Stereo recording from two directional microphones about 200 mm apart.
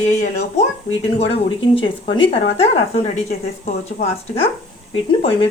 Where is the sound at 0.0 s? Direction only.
35° left (ahead or behind).